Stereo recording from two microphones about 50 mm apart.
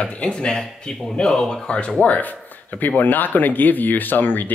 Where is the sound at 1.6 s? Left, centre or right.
Centre.